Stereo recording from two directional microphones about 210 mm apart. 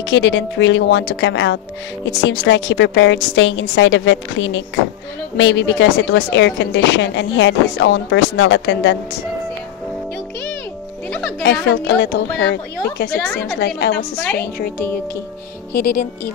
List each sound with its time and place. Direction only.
0.0 s a woman's voice: 60° left (ahead or behind)
11.1 s music: 5° left (ahead or behind)
11.6 s a woman's voice: 55° left (ahead or behind)
13.1 s a woman's voice: 5° left (ahead or behind)
13.6 s a woman's voice: 55° left (ahead or behind)
15.7 s a woman's voice: 45° left (ahead or behind)